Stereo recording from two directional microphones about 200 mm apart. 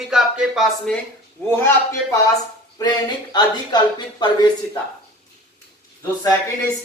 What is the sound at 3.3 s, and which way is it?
Speech, 20° left (ahead or behind).